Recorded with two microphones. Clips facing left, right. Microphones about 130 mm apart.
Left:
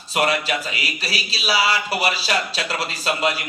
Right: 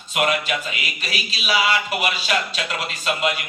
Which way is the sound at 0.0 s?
35° left (ahead or behind).